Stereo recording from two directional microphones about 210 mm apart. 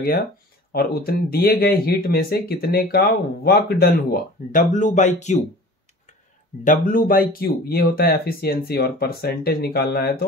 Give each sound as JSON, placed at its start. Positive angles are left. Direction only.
{"t": 0.7, "sound": "speech", "side_deg": 45}
{"t": 6.6, "sound": "speech", "side_deg": 40}